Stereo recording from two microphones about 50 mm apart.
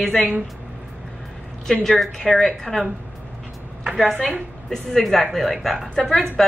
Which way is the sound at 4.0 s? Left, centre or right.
Centre.